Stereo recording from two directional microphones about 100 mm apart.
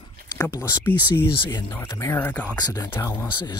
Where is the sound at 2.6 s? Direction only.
40° left (ahead or behind).